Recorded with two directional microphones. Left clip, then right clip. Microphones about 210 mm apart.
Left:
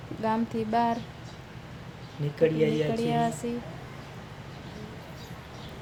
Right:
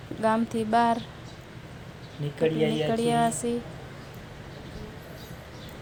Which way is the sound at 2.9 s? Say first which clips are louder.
Right 3 dB; 10° right (ahead or behind).